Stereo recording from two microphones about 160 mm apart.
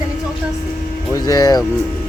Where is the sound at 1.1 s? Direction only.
20° left (ahead or behind).